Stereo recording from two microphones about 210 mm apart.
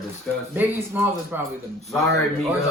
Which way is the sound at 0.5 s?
10° right (ahead or behind).